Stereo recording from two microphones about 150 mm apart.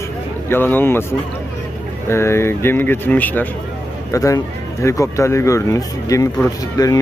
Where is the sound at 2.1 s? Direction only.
15° left (ahead or behind).